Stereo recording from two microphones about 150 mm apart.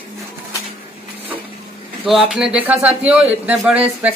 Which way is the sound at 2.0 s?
5° right (ahead or behind).